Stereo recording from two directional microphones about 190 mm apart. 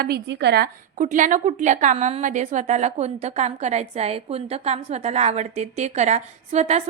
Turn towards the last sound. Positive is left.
turn(degrees=-35)  # may be behind; listen again after turning